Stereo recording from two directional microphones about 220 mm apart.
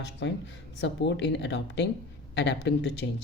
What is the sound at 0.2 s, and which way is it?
Speech, 55° left (ahead or behind).